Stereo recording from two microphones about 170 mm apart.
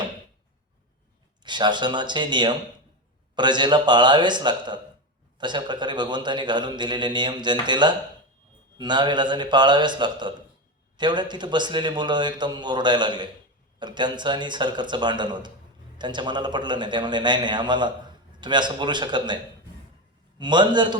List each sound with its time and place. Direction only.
1.5 s a man's voice: 25° right (ahead or behind)
20.4 s a man's voice: 25° right (ahead or behind)